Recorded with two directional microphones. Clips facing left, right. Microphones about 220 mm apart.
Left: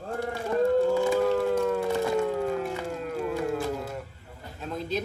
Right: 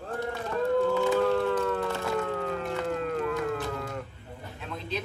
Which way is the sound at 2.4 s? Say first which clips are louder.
Left 1 dB; 5° left (ahead or behind).